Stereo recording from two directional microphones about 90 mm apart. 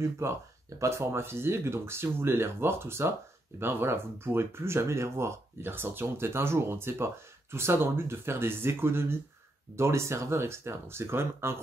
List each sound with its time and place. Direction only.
0.0 s speech: 30° right (ahead or behind)